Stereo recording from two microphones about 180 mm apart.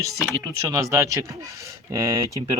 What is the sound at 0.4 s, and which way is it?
Speech, 15° right (ahead or behind).